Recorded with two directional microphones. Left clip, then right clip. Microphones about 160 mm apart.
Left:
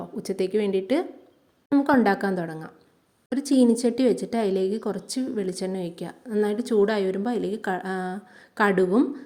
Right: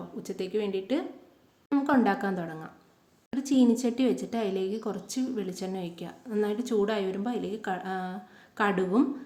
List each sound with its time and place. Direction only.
0.2 s a woman's voice: 45° left (ahead or behind)